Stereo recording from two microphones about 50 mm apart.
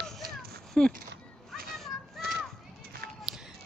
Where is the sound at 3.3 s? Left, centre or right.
Centre.